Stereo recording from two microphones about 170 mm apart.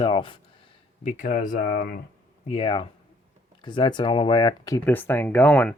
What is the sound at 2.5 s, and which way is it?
Speech, 30° left (ahead or behind).